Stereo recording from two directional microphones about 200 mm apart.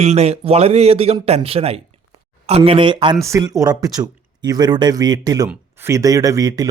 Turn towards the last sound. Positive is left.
turn(degrees=-20)  # may be behind; listen again after turning